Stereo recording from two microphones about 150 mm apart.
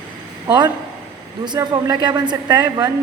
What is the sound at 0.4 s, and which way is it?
A man's voice, 30° right (ahead or behind).